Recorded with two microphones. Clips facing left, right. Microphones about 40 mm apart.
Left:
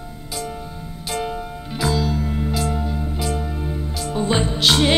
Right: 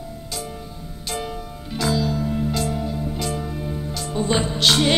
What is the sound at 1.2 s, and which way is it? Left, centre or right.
Music, centre.